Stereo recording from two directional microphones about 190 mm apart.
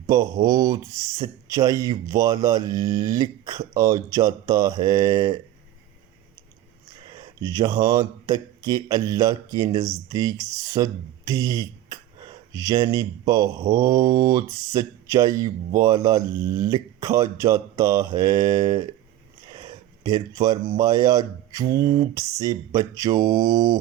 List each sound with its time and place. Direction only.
0.1 s speech: 20° right (ahead or behind)
7.0 s speech: 20° right (ahead or behind)
21.7 s a sound: 50° right (ahead or behind)
22.1 s speech: 15° right (ahead or behind)